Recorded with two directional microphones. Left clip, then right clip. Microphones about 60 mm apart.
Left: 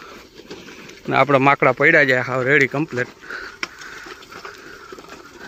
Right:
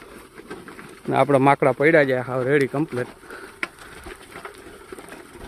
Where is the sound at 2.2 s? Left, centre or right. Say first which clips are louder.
Left 4 dB; centre.